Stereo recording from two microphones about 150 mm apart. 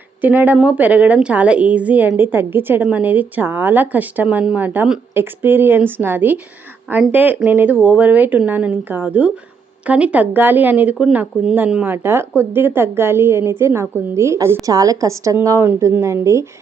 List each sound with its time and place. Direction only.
0.2 s a woman's voice: 10° right (ahead or behind)